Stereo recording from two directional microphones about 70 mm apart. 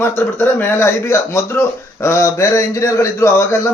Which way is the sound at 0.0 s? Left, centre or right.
Left.